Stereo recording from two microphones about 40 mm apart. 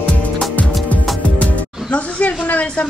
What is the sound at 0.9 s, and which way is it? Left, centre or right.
Music, left.